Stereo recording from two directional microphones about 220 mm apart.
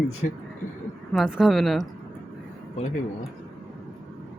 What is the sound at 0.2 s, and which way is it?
Speech, 40° left (ahead or behind).